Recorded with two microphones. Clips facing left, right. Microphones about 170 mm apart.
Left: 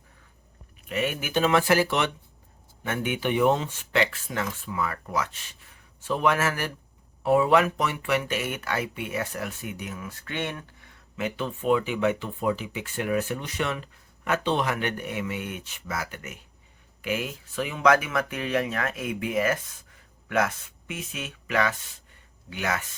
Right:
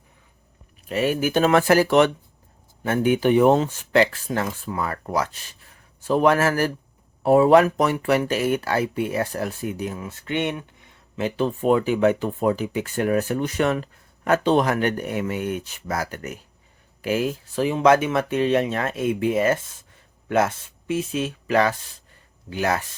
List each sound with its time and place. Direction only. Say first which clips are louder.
0.9 s speech: right 7 dB; 35° right (ahead or behind)